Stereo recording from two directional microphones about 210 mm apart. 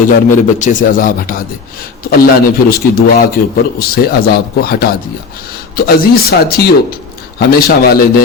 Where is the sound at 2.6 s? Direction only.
45° left (ahead or behind).